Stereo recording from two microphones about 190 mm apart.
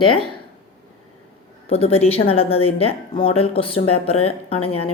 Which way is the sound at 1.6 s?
30° left (ahead or behind).